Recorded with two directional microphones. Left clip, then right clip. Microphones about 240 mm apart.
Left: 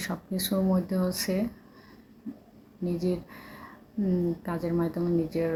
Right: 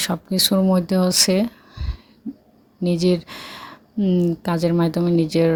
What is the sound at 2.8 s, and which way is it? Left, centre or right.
Speech, right.